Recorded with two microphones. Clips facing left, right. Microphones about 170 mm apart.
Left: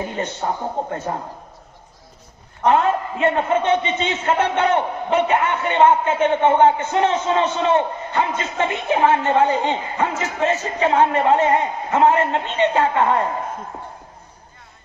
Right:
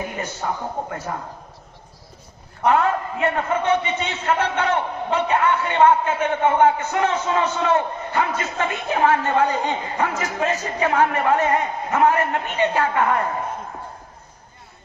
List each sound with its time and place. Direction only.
0.0 s a man's voice: 30° left (ahead or behind)
2.6 s a man's voice: 25° left (ahead or behind)